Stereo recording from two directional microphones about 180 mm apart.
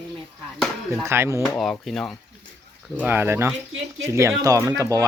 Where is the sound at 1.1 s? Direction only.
15° right (ahead or behind).